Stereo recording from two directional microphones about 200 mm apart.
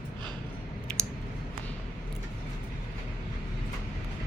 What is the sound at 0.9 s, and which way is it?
Clicking, 5° left (ahead or behind).